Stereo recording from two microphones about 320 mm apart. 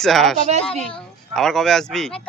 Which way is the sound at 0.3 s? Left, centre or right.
Right.